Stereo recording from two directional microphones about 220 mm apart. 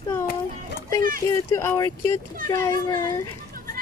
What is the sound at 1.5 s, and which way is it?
A child's voice, 10° left (ahead or behind).